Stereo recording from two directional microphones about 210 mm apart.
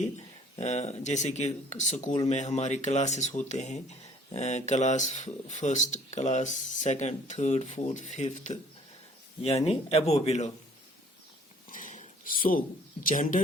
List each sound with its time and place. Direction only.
0.5 s speech: 30° left (ahead or behind)
11.7 s speech: 40° left (ahead or behind)